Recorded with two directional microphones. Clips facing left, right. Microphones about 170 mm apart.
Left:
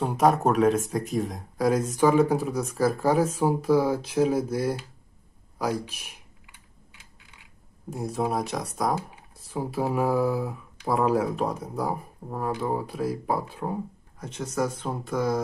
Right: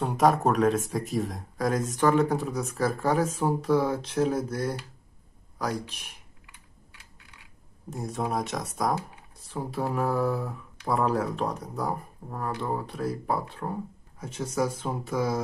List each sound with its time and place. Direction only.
0.0 s speech: centre (ahead or behind)
6.4 s typing: 15° left (ahead or behind)
7.9 s speech: centre (ahead or behind)
14.2 s speech: 10° right (ahead or behind)